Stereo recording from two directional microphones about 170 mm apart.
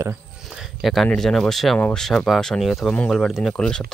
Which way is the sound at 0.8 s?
Centre (ahead or behind).